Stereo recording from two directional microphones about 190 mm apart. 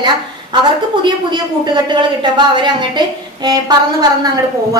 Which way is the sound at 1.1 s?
25° right (ahead or behind).